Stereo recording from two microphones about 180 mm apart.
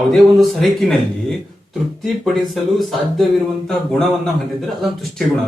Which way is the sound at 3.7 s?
Centre (ahead or behind).